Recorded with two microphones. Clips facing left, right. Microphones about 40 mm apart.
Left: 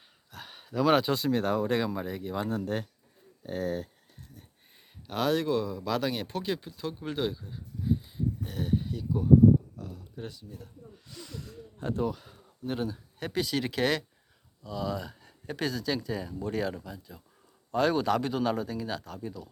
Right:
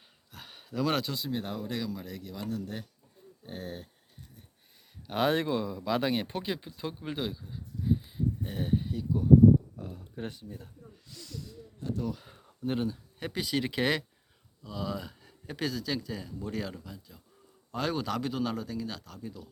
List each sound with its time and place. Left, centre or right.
0.3 s a sound: centre
1.1 s speech: left
1.9 s speech: left
2.3 s speech: left
5.1 s speech: right
6.0 s speech: right; by 8.2 s centre
8.4 s speech: centre
9.7 s a sound: right
11.3 s snort: left
12.3 s a sound: centre
12.8 s speech: centre
14.6 s speech: centre